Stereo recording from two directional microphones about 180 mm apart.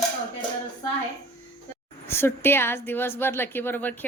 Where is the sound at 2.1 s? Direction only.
15° left (ahead or behind).